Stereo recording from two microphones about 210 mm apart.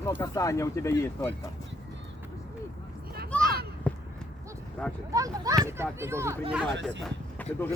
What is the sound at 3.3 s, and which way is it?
Children playing, 5° left (ahead or behind).